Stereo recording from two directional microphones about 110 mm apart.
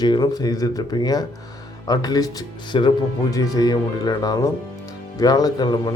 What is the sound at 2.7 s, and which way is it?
Speech, 50° left (ahead or behind).